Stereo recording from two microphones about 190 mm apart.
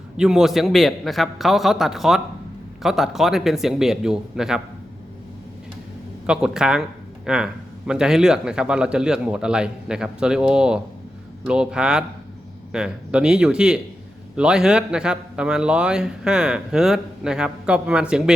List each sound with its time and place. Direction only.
0.2 s a man's voice: centre (ahead or behind)
6.2 s a man's voice: 5° right (ahead or behind)